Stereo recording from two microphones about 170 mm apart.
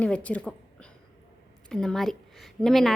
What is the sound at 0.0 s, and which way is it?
Speech, 10° left (ahead or behind).